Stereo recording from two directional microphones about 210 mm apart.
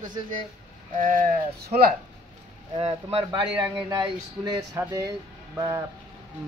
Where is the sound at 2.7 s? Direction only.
25° right (ahead or behind).